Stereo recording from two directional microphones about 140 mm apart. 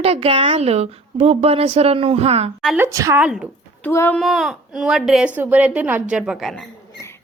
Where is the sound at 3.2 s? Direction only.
5° right (ahead or behind).